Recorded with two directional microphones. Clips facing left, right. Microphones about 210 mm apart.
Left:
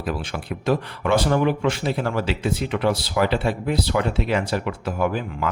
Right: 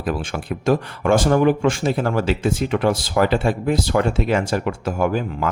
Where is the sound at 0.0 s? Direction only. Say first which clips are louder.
Right 3 dB; 50° right (ahead or behind).